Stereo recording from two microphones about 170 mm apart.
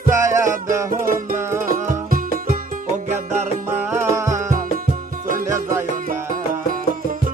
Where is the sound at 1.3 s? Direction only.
15° right (ahead or behind).